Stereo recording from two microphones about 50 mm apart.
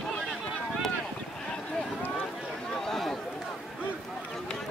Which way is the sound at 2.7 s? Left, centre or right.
Centre.